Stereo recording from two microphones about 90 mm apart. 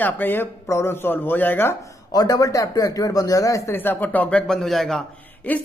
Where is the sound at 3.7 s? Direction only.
25° left (ahead or behind); by 5.0 s 5° left (ahead or behind).